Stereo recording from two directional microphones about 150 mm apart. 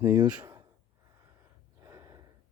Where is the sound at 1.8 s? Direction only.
25° right (ahead or behind).